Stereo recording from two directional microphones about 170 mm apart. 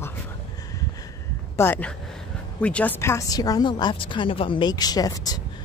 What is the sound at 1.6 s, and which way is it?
A woman's voice, 10° left (ahead or behind).